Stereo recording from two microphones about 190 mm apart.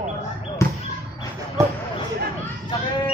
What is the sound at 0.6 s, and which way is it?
Basketball bounce, 15° left (ahead or behind).